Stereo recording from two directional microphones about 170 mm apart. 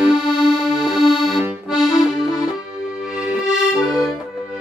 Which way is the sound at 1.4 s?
5° right (ahead or behind).